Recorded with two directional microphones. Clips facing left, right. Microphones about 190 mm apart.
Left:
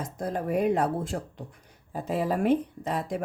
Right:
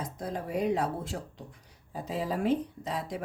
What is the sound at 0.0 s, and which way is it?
A woman's voice, 50° left (ahead or behind).